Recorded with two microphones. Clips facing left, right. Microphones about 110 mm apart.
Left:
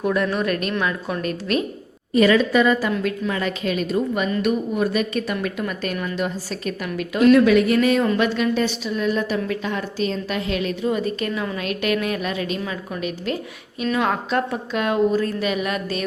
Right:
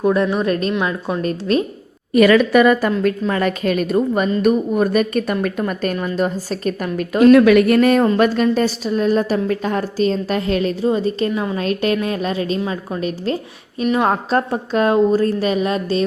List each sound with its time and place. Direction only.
0.0 s a woman's voice: 30° right (ahead or behind)
2.1 s a woman's voice: 70° right (ahead or behind)
3.0 s a woman's voice: 45° right (ahead or behind)
7.3 s a woman's voice: 60° right (ahead or behind); by 13.8 s 35° right (ahead or behind)
13.8 s a woman's voice: 25° right (ahead or behind)
14.1 s a woman's voice: 35° right (ahead or behind)